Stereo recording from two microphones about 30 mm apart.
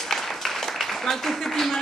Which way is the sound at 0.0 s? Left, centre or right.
Centre.